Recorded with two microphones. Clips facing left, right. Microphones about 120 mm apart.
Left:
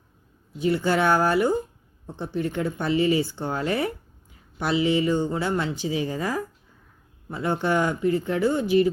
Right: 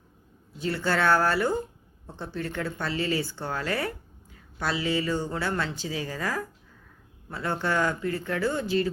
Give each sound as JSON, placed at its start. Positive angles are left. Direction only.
{"t": 0.6, "sound": "a woman's voice", "side_deg": 15}